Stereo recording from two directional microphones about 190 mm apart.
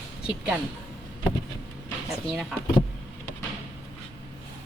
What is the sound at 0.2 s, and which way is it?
Speech, 5° right (ahead or behind).